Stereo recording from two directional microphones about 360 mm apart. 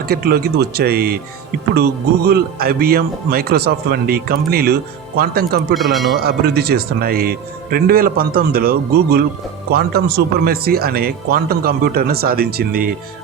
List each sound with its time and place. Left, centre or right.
0.0 s speech: right
5.7 s speech: centre
6.1 s speech: right